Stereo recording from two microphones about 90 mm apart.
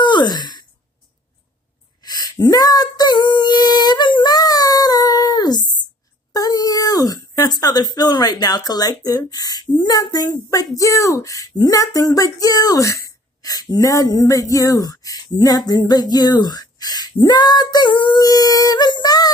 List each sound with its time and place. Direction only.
0.0 s sigh: 55° left (ahead or behind)
2.0 s female singing: 50° left (ahead or behind)
6.3 s speech: 45° left (ahead or behind)